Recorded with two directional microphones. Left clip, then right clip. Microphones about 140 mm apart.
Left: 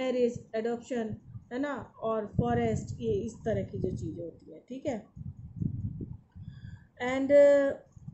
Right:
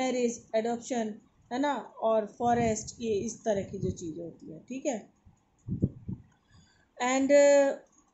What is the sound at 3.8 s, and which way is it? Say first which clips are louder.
Speech: even; 45° right (ahead or behind).